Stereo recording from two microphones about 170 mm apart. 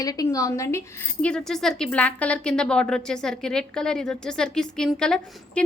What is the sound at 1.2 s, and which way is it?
A woman's voice, 5° left (ahead or behind).